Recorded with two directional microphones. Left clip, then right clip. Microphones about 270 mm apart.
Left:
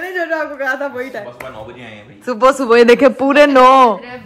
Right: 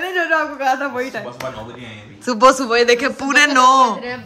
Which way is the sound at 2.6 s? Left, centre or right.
Centre.